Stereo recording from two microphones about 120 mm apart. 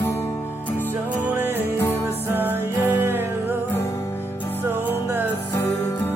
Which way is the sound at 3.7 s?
20° left (ahead or behind).